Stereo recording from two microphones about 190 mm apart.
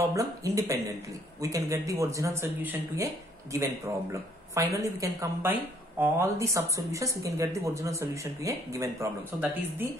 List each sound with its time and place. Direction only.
0.0 s speech: 15° right (ahead or behind)